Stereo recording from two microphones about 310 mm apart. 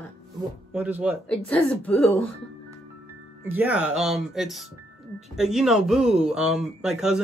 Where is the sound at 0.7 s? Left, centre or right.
Centre.